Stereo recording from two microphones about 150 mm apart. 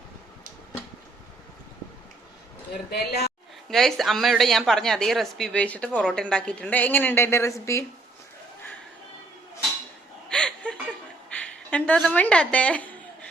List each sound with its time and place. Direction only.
2.9 s a man's voice: 90° left
3.7 s a woman's voice: centre (ahead or behind); by 7.9 s 20° left (ahead or behind)
10.2 s chuckle: 5° left (ahead or behind)
11.3 s a woman's voice: 10° left (ahead or behind)